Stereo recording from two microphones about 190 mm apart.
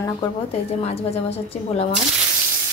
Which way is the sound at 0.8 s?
35° left (ahead or behind).